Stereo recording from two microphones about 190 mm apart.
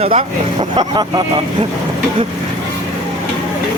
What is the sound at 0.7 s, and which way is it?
Speech, 25° right (ahead or behind).